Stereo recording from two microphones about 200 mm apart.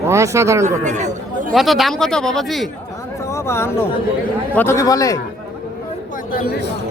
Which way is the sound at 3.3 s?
15° left (ahead or behind).